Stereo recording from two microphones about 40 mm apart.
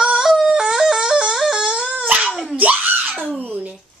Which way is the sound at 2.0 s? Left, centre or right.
Right.